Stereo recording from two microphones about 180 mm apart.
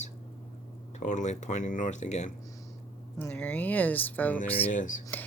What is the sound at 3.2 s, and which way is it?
Speech, 5° left (ahead or behind).